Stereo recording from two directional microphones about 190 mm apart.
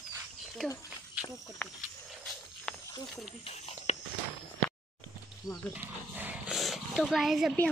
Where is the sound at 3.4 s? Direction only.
35° left (ahead or behind).